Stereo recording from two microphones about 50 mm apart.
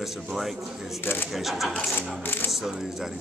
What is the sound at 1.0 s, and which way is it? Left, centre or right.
Speech, left.